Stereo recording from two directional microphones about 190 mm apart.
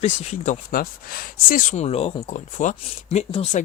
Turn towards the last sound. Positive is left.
turn(degrees=35)  # may be behind; listen again after turning